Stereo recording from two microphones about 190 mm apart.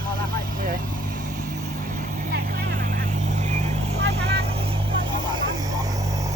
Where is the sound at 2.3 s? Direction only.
45° right (ahead or behind).